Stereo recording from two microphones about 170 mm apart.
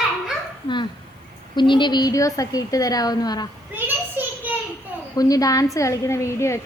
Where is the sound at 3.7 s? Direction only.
10° right (ahead or behind).